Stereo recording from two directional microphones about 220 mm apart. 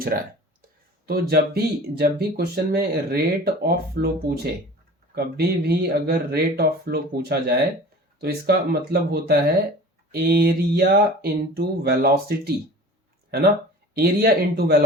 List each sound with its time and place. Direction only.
0.0 s speech: 40° right (ahead or behind)
5.1 s speech: 45° right (ahead or behind)
13.9 s speech: 45° right (ahead or behind)